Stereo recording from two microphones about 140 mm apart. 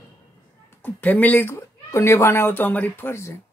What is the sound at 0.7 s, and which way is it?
Speech, 15° left (ahead or behind).